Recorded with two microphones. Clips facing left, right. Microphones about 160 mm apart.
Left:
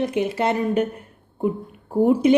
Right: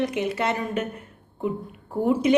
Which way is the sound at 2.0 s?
30° left (ahead or behind).